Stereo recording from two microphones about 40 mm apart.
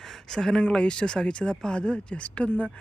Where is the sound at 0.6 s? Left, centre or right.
Left.